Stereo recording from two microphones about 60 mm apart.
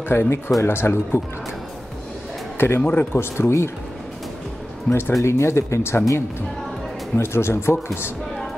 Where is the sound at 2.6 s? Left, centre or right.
Left.